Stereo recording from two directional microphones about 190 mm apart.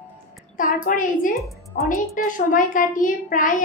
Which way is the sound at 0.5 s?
45° left (ahead or behind).